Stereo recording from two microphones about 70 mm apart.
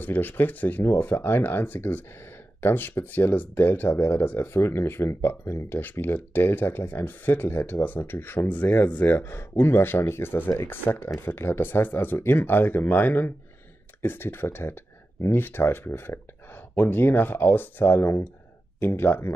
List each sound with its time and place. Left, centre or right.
0.0 s speech: left